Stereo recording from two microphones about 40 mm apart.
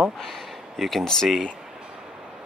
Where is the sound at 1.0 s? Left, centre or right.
Centre.